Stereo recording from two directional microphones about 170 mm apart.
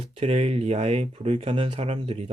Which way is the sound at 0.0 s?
35° right (ahead or behind).